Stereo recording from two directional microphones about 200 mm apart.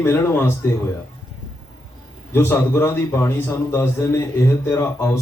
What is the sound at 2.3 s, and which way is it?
A man's voice, 10° left (ahead or behind).